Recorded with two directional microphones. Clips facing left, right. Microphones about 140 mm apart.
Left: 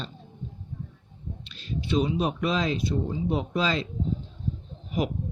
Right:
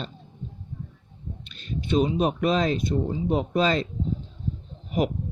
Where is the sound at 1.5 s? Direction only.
50° right (ahead or behind).